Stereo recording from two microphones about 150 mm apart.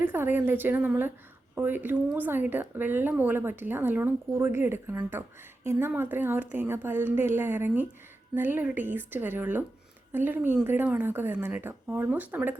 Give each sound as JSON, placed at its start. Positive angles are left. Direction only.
{"t": 0.1, "sound": "speech", "side_deg": -15}